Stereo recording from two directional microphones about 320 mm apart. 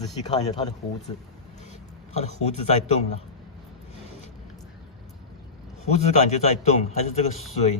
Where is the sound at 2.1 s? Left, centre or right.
Left.